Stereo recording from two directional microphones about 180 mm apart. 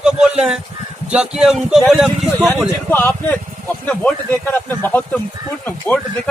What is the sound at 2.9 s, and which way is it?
Speech, 10° left (ahead or behind).